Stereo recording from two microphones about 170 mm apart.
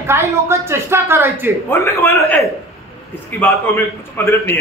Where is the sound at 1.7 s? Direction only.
15° left (ahead or behind).